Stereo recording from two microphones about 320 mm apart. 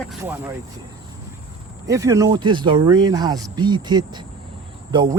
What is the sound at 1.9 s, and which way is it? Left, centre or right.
Speech, centre.